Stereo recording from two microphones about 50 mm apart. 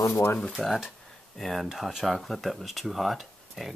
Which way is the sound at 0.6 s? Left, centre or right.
Centre.